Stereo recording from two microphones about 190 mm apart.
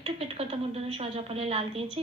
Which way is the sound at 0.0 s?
30° right (ahead or behind).